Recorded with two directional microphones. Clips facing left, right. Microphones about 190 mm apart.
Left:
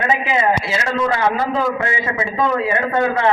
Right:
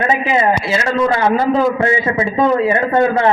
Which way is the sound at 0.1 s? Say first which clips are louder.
Right 1 dB; 35° right (ahead or behind).